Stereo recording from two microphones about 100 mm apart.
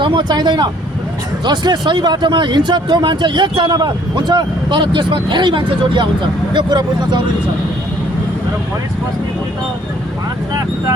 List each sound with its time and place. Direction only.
0.0 s speech: 50° right (ahead or behind)